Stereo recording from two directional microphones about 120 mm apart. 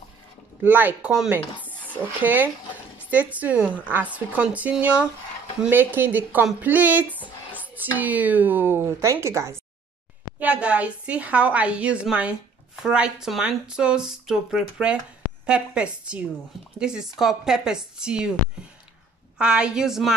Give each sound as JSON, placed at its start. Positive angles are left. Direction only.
{"t": 0.7, "sound": "speech", "side_deg": -15}
{"t": 2.2, "sound": "speech", "side_deg": -15}
{"t": 7.1, "sound": "a sound", "side_deg": 15}
{"t": 7.6, "sound": "speech", "side_deg": -15}
{"t": 10.4, "sound": "speech", "side_deg": -10}
{"t": 19.3, "sound": "speech", "side_deg": -10}